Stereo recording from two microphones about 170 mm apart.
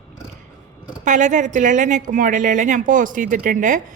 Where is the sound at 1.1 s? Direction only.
45° right (ahead or behind).